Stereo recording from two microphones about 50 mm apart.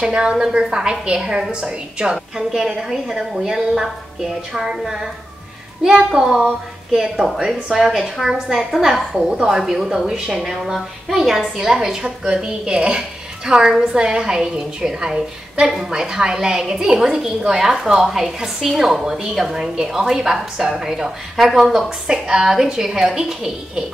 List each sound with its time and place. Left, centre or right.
0.0 s a woman's voice: centre
2.5 s a woman's voice: centre